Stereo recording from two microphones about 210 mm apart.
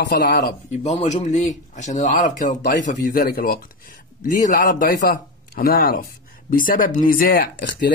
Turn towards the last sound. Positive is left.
turn(degrees=55)  # may be behind; listen again after turning